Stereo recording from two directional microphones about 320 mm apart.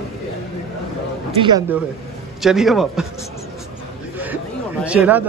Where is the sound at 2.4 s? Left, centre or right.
Centre.